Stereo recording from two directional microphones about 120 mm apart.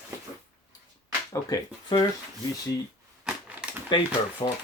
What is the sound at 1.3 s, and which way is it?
Speech, 30° left (ahead or behind).